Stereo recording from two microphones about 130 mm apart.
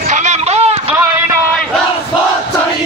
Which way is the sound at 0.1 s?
60° right (ahead or behind).